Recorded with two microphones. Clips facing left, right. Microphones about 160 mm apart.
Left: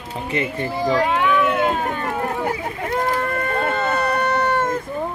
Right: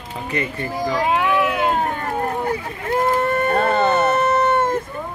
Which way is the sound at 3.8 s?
25° right (ahead or behind).